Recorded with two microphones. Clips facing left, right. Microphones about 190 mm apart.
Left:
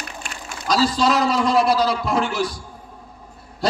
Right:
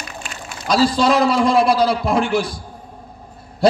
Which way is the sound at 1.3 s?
40° left (ahead or behind).